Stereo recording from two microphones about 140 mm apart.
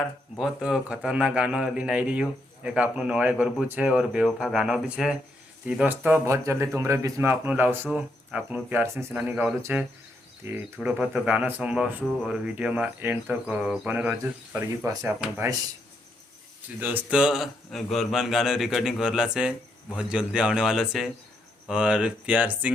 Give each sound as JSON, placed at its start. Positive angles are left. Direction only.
{"t": 0.3, "sound": "speech", "side_deg": -5}
{"t": 10.8, "sound": "speech", "side_deg": -5}
{"t": 16.8, "sound": "speech", "side_deg": -10}